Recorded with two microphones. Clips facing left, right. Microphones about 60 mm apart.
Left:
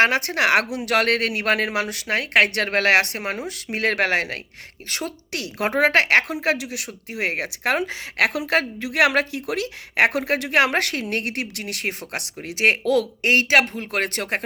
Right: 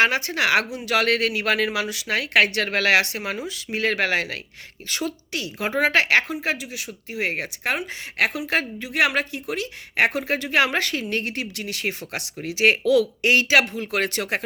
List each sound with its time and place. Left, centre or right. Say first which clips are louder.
0.0 s speech: left 2 dB; left
5.3 s a woman's voice: left 2 dB; left
5.7 s a woman's voice: left 2 dB; left